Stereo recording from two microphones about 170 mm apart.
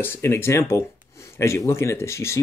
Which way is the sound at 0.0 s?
15° left (ahead or behind).